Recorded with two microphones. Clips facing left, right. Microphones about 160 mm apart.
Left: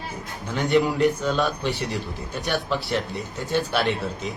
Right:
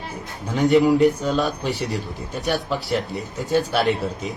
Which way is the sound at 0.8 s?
35° right (ahead or behind).